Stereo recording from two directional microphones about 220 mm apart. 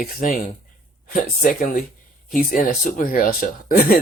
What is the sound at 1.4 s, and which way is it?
Speech, 40° left (ahead or behind).